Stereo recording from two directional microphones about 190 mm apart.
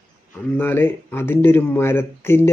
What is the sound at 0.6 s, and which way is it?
Speech, 10° left (ahead or behind).